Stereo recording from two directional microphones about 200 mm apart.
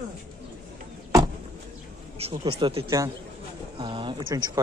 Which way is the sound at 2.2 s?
30° right (ahead or behind).